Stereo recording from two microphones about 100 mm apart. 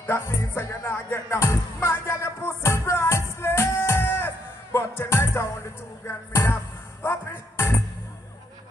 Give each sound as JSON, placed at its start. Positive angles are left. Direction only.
{"t": 0.0, "sound": "music", "side_deg": 25}